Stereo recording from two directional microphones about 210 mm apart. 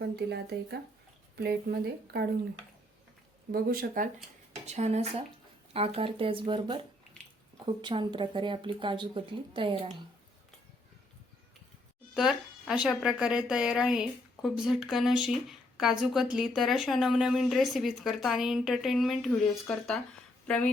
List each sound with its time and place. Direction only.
0.0 s speech: 50° right (ahead or behind)
3.5 s speech: 45° right (ahead or behind); by 10.0 s 25° right (ahead or behind)
12.1 s speech: 5° right (ahead or behind)